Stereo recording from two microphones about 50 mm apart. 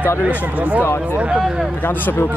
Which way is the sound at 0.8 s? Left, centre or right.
Left.